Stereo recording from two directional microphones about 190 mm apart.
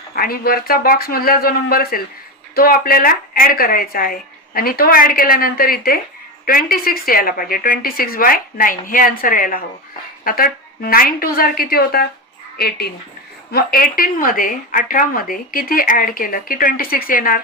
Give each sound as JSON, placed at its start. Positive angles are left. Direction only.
{"t": 0.1, "sound": "a woman's voice", "side_deg": 50}